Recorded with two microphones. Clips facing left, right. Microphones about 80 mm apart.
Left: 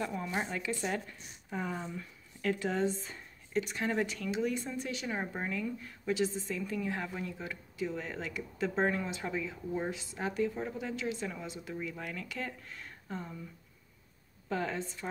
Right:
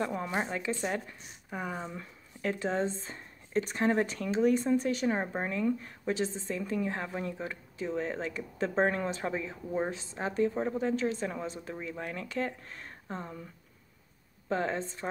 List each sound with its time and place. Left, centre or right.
0.0 s speech: right; by 1.9 s centre
2.0 s a woman's voice: right
14.5 s a woman's voice: right